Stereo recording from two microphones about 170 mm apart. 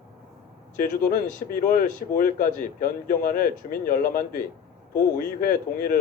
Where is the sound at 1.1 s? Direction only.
55° left (ahead or behind).